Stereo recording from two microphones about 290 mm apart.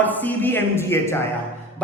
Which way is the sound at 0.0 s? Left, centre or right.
Centre.